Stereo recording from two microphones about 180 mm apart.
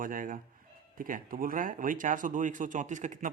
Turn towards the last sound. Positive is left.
turn(degrees=-45)  # may be behind; listen again after turning